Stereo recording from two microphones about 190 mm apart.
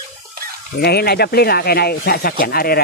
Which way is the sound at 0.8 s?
55° left (ahead or behind).